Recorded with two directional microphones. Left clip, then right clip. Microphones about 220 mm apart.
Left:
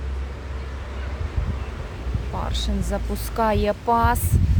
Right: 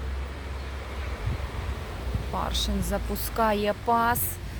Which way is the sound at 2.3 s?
10° right (ahead or behind).